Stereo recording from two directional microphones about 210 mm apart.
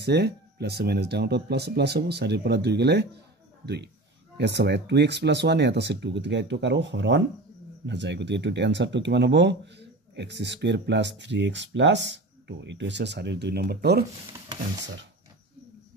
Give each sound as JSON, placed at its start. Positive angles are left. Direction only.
{"t": 0.0, "sound": "speech", "side_deg": -50}